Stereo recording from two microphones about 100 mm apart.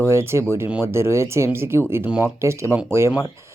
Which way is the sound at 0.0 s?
25° right (ahead or behind).